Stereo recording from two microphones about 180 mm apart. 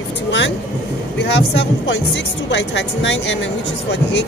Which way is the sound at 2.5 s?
90° left.